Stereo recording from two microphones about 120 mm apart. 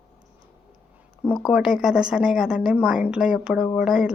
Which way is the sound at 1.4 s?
5° right (ahead or behind).